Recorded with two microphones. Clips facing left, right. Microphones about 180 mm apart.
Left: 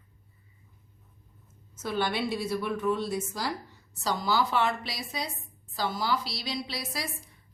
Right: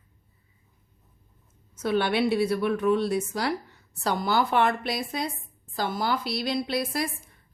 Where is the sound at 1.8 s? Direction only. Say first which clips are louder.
Right 6 dB; 65° right (ahead or behind).